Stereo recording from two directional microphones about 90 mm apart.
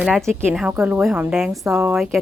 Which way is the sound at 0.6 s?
20° right (ahead or behind).